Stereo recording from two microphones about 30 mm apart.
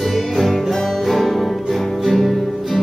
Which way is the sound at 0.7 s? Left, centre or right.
Centre.